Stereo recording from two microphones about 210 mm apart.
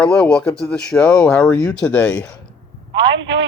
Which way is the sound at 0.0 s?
5° left (ahead or behind).